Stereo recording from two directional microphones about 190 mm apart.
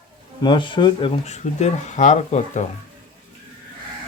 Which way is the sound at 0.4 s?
25° left (ahead or behind).